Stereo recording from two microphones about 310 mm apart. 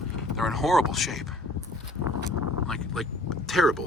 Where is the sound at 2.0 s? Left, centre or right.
Left.